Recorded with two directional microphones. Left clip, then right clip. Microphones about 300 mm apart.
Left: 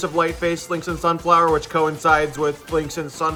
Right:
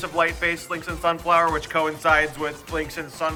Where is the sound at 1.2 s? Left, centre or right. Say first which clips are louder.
Left 4 dB; right.